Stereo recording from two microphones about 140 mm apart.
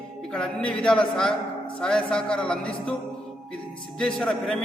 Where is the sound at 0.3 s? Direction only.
5° left (ahead or behind).